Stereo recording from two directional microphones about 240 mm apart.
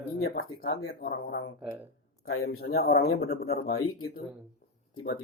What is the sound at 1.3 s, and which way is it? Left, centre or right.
Speech, left.